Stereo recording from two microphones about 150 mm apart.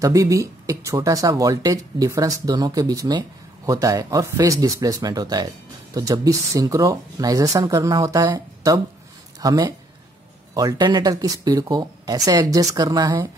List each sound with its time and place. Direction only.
0.0 s speech: 20° right (ahead or behind)